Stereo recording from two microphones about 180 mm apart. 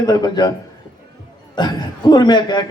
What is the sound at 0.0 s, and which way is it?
Speech, 25° left (ahead or behind).